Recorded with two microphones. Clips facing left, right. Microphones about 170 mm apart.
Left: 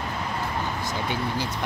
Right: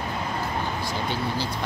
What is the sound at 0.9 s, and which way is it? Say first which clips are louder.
Speech: even; 20° left (ahead or behind).